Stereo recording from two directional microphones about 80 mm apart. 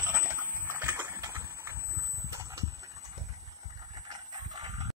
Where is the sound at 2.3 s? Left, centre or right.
Right.